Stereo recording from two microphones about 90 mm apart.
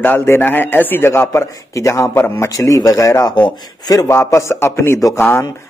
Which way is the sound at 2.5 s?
40° left (ahead or behind).